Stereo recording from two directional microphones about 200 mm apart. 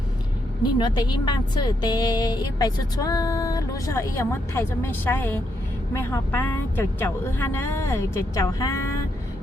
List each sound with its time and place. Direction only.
0.6 s a woman's voice: 20° left (ahead or behind)